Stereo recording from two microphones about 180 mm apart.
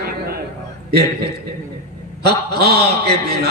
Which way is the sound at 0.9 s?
65° right (ahead or behind).